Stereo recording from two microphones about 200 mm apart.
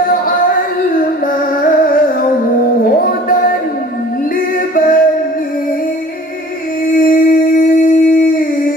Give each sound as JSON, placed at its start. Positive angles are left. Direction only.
{"t": 0.1, "sound": "music", "side_deg": 45}
{"t": 4.6, "sound": "music", "side_deg": 45}
{"t": 7.0, "sound": "a sound", "side_deg": 45}